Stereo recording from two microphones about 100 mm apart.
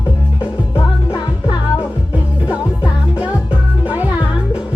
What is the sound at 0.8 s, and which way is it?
Music, 40° left (ahead or behind).